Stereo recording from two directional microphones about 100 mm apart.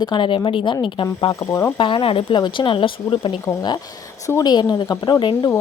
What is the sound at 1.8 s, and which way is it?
Speech, 55° left (ahead or behind).